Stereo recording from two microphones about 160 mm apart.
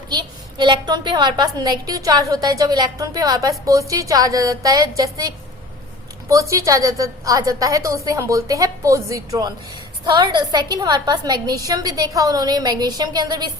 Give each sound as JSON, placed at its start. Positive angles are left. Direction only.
{"t": 0.1, "sound": "a woman's voice", "side_deg": -25}